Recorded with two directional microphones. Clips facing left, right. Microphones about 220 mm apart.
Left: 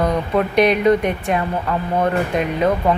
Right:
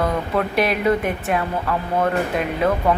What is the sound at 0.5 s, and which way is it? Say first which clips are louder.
Speech: left 7 dB; 5° right (ahead or behind).